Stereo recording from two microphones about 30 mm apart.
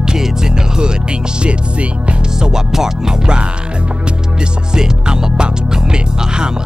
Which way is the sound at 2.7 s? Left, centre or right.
Centre.